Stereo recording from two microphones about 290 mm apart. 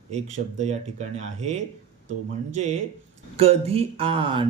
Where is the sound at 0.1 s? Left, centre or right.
Right.